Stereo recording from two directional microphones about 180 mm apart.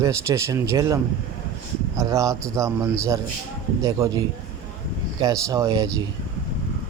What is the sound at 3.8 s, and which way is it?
Speech, 20° right (ahead or behind).